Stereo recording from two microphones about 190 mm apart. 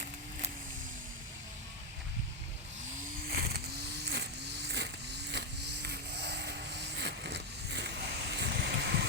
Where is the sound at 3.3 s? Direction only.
55° right (ahead or behind).